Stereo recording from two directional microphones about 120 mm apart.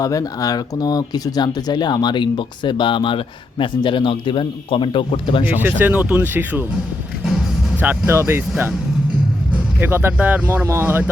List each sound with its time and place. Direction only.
0.0 s speech: 30° left (ahead or behind); by 5.5 s 45° left (ahead or behind)
5.5 s speech: 15° right (ahead or behind)
7.8 s speech: 20° right (ahead or behind)